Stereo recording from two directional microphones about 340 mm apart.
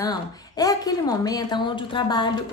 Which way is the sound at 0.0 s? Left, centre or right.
Centre.